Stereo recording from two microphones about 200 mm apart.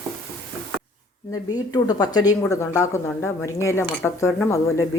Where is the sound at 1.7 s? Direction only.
20° left (ahead or behind).